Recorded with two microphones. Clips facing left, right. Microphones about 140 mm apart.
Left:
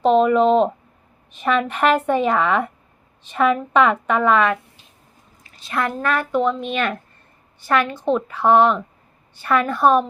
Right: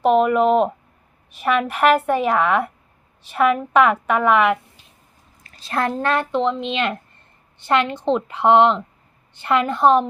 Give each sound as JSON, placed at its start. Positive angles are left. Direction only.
{"t": 0.0, "sound": "a woman's voice", "side_deg": -10}
{"t": 5.5, "sound": "speech", "side_deg": -35}